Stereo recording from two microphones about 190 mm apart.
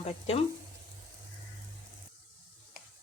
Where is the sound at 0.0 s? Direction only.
35° left (ahead or behind).